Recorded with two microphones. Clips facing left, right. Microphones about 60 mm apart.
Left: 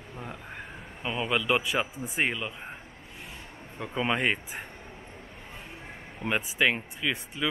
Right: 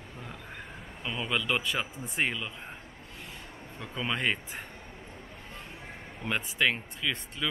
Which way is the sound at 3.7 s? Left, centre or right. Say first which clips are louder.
Left 5 dB; centre.